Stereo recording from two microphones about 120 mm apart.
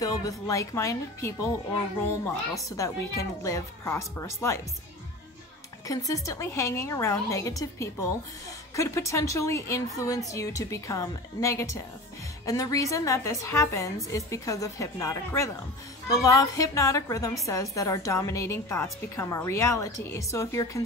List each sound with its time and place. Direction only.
0.0 s a woman's voice: 30° left (ahead or behind)
2.7 s a woman's voice: 25° left (ahead or behind)
5.9 s a woman's voice: 30° left (ahead or behind)